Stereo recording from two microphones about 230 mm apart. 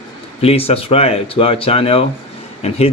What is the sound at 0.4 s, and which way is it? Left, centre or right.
Speech, left.